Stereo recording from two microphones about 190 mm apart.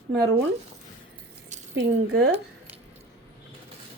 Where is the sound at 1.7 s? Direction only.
55° right (ahead or behind).